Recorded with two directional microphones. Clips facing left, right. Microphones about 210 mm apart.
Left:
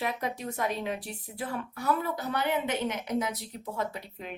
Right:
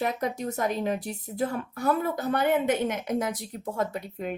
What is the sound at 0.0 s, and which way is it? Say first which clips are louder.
Speech: right 4 dB; 45° right (ahead or behind).